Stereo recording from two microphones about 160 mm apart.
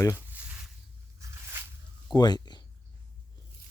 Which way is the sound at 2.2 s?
25° left (ahead or behind).